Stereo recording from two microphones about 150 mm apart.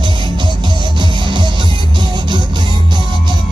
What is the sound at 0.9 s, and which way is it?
Music, 30° right (ahead or behind).